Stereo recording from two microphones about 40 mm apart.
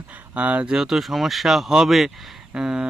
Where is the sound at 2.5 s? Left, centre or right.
Right.